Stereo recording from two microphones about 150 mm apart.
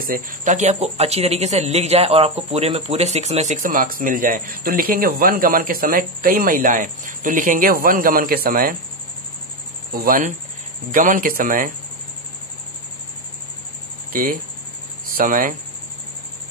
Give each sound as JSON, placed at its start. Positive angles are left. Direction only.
{"t": 0.0, "sound": "speech", "side_deg": -70}
{"t": 9.9, "sound": "speech", "side_deg": -70}
{"t": 15.1, "sound": "speech", "side_deg": -65}